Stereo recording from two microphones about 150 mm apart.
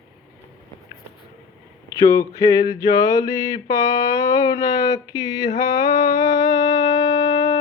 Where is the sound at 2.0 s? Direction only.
20° left (ahead or behind).